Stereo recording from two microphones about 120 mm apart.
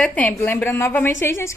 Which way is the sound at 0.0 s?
10° left (ahead or behind).